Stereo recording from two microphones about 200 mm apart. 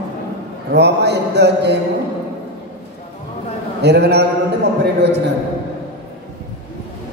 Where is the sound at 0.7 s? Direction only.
55° right (ahead or behind).